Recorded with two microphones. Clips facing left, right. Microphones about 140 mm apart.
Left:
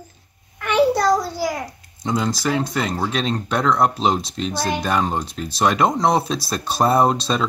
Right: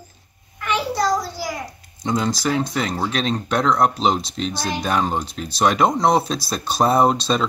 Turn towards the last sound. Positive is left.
turn(degrees=0)  # may be behind; listen again after turning